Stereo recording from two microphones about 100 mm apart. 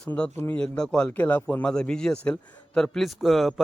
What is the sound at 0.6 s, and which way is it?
A man's voice, 10° left (ahead or behind).